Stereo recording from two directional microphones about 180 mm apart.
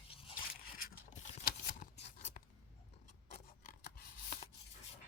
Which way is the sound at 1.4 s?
55° left (ahead or behind).